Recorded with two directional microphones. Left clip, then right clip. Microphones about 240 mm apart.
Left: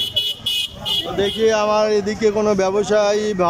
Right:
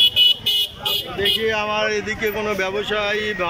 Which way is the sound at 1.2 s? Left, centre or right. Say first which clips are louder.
Left 3 dB; centre.